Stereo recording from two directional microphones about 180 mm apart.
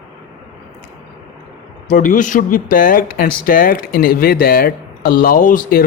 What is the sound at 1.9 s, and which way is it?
A man's voice, 50° left (ahead or behind).